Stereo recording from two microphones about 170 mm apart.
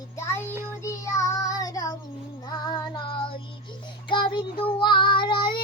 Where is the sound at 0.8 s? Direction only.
20° left (ahead or behind).